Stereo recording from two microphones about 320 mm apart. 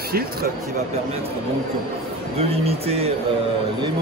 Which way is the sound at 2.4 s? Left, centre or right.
Centre.